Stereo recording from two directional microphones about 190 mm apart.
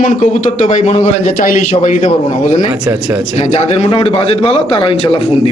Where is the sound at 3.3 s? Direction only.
35° left (ahead or behind).